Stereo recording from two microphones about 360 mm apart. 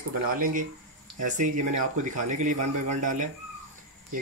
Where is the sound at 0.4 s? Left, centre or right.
Right.